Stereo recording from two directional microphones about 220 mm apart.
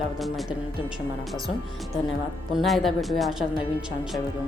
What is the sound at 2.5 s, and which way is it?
Speech, centre (ahead or behind).